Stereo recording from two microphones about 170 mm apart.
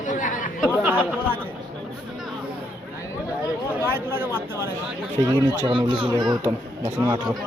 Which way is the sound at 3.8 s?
15° right (ahead or behind).